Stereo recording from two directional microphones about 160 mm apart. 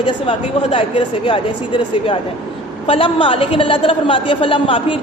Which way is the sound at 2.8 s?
35° left (ahead or behind).